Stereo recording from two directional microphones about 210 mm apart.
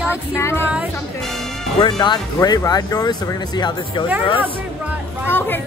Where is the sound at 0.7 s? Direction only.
Centre (ahead or behind).